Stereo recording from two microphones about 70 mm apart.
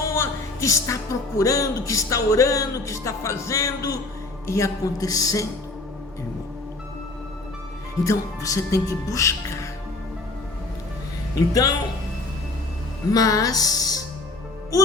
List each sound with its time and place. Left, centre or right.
0.1 s a sound: left
1.4 s speech: left
4.4 s speech: left
8.0 s speech: left
11.3 s speech: left
13.1 s speech: left